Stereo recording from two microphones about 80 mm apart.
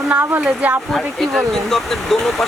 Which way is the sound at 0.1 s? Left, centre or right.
Right.